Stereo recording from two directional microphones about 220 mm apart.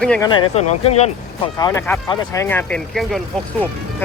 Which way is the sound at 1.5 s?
15° left (ahead or behind).